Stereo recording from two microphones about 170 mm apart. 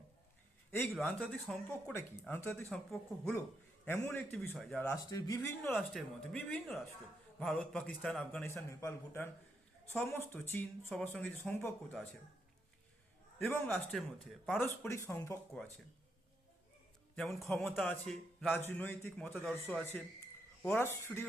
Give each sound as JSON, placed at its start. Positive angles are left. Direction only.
{"t": 0.9, "sound": "speech", "side_deg": 0}
{"t": 2.6, "sound": "a man's voice", "side_deg": 0}
{"t": 3.8, "sound": "a man's voice", "side_deg": 15}
{"t": 4.9, "sound": "a man's voice", "side_deg": 20}
{"t": 8.4, "sound": "speech", "side_deg": 15}
{"t": 13.4, "sound": "speech", "side_deg": 10}
{"t": 17.2, "sound": "a man's voice", "side_deg": 0}